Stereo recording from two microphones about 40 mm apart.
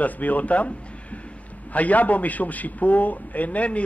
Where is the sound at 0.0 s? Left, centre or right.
Left.